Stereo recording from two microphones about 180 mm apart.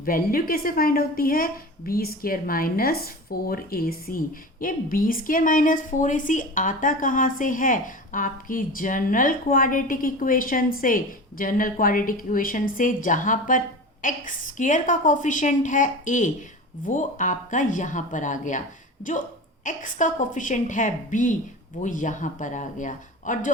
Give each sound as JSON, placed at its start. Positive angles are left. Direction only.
{"t": 0.0, "sound": "a woman's voice", "side_deg": 55}
{"t": 19.6, "sound": "a woman's voice", "side_deg": 45}